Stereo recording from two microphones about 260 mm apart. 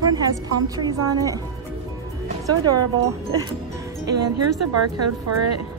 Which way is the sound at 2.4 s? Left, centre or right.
Centre.